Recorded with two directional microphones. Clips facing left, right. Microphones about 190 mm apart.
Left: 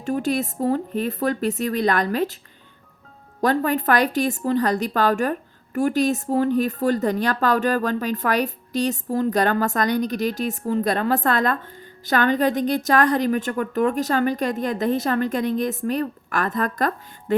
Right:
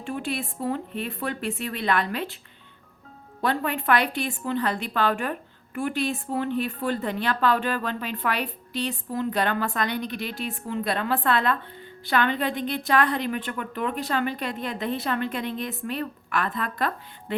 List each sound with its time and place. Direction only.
0.0 s a woman's voice: 40° left (ahead or behind)
3.4 s a woman's voice: 40° left (ahead or behind)